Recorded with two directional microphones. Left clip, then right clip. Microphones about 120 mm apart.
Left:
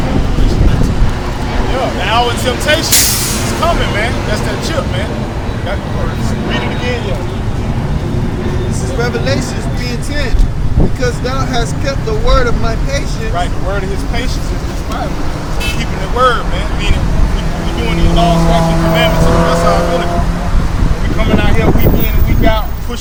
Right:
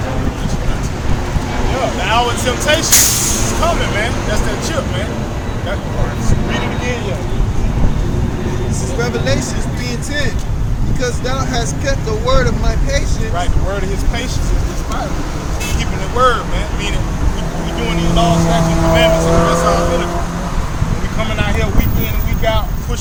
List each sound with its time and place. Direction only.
1.7 s speech: 5° left (ahead or behind)
6.5 s speech: 5° left (ahead or behind)
9.0 s speech: 15° right (ahead or behind)
11.0 s speech: 15° right (ahead or behind)
16.1 s speech: 5° right (ahead or behind)
17.8 s speech: 5° right (ahead or behind)
21.2 s speech: centre (ahead or behind)